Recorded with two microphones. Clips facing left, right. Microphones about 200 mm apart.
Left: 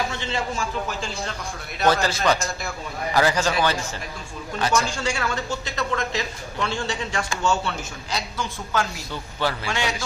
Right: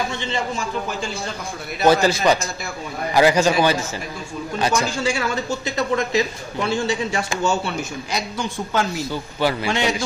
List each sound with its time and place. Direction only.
1.8 s speech: 10° right (ahead or behind)
4.6 s a man's voice: 15° right (ahead or behind)